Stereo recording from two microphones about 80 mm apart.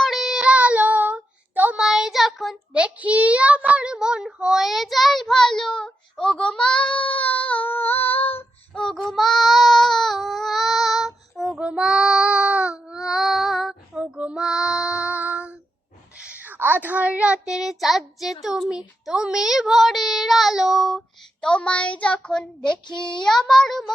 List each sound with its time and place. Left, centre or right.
0.0 s child singing: centre
1.8 s child singing: centre
2.7 s child singing: centre; by 8.8 s left
8.8 s child singing: centre
16.1 s a sound: centre
18.7 s child singing: centre
23.2 s a sound: centre